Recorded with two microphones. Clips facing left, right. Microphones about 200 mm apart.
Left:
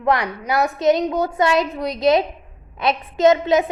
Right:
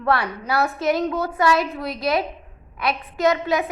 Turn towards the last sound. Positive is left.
turn(degrees=20)  # may be behind; listen again after turning